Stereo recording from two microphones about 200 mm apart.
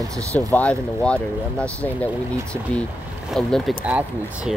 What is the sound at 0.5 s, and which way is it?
Speech, 5° left (ahead or behind).